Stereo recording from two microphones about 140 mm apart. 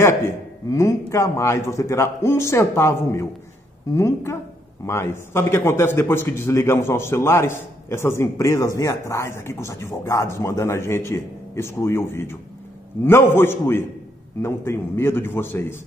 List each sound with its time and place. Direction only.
0.0 s a man's voice: 20° left (ahead or behind)